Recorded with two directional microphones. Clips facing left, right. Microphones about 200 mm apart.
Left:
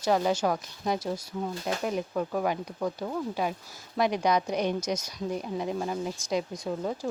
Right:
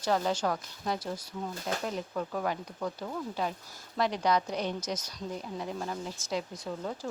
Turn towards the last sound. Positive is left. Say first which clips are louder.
# left 5 dB
turn(degrees=15)  # may be behind; listen again after turning